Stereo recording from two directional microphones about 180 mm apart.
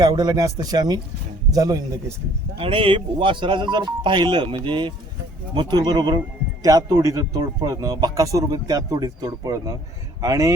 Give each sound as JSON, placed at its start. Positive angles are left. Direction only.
{"t": 0.0, "sound": "speech", "side_deg": -25}
{"t": 2.6, "sound": "speech", "side_deg": -30}